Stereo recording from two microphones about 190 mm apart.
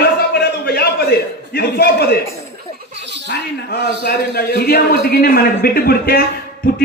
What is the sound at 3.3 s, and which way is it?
A man's voice, 60° left (ahead or behind).